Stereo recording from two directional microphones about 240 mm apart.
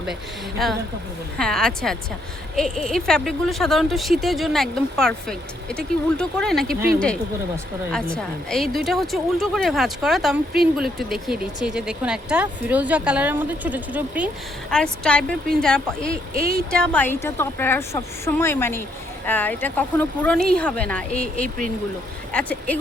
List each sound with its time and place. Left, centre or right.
0.6 s speech: centre
8.1 s speech: centre
16.3 s speech: right
16.7 s a woman's voice: centre